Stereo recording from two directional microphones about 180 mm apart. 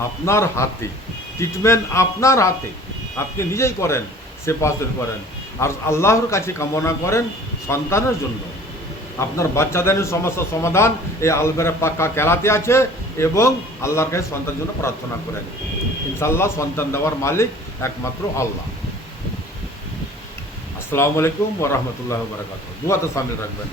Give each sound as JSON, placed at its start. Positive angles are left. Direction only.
{"t": 0.3, "sound": "a man's voice", "side_deg": 15}
{"t": 9.1, "sound": "a man's voice", "side_deg": 15}
{"t": 16.1, "sound": "a man's voice", "side_deg": 15}
{"t": 20.9, "sound": "a man's voice", "side_deg": 15}